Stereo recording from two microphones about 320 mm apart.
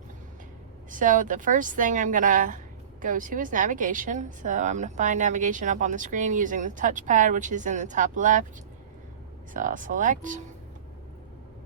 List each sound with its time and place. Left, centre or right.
0.9 s a woman's voice: right
9.5 s a woman's voice: right